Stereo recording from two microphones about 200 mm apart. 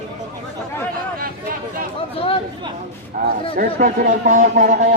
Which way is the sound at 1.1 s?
45° right (ahead or behind).